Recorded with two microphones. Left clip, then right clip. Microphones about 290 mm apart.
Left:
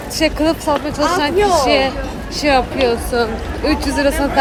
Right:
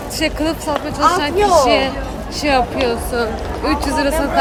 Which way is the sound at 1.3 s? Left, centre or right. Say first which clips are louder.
Right 1 dB; centre.